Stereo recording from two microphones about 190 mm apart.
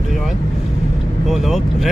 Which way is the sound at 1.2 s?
Centre (ahead or behind).